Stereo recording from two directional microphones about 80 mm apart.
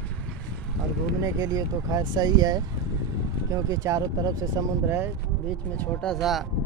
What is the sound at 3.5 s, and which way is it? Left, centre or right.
Speech, right.